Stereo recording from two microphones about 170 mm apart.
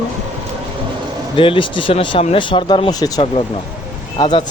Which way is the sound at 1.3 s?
30° left (ahead or behind).